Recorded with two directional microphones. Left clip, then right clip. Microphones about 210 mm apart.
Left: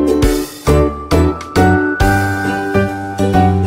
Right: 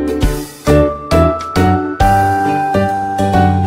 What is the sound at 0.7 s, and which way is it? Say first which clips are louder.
Music: right 3 dB; centre (ahead or behind).